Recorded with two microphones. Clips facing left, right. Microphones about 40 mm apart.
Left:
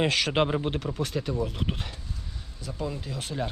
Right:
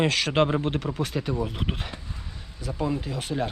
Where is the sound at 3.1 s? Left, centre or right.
Centre.